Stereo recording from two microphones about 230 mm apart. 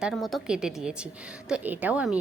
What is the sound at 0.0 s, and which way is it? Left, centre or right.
A woman's voice, centre.